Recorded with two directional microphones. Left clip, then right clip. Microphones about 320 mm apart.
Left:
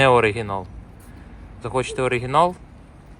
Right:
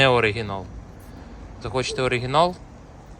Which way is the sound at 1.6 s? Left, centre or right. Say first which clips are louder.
Left 1 dB; centre.